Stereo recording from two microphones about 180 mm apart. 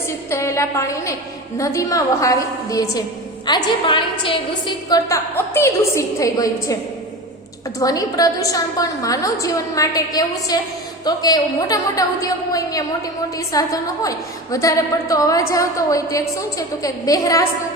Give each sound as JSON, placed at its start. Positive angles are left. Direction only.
{"t": 0.3, "sound": "a woman's voice", "side_deg": 15}
{"t": 7.8, "sound": "a woman's voice", "side_deg": 20}